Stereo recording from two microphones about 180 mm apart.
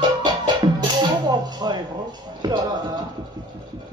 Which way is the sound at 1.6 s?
25° right (ahead or behind).